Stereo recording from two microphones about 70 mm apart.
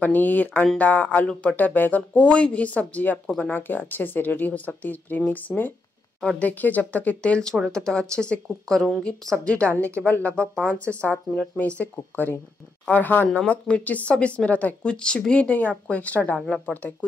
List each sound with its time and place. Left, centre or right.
0.0 s a woman's voice: left
16.4 s a woman's voice: centre